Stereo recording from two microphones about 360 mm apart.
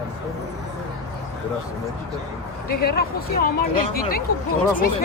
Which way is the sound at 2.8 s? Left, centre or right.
Left.